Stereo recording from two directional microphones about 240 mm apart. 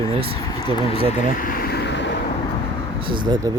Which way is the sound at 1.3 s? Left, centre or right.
Left.